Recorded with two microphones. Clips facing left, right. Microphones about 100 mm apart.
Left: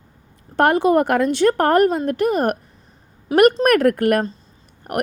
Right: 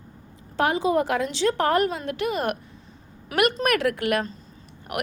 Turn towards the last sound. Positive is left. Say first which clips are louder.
# left 7 dB
turn(degrees=45)  # may be behind; listen again after turning